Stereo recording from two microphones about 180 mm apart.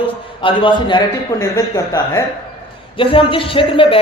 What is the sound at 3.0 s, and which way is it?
Speech, 30° left (ahead or behind).